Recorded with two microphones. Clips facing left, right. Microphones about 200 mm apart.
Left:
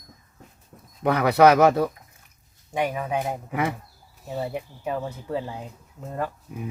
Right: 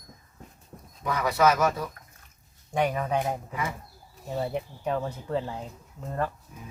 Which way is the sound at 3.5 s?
70° left (ahead or behind).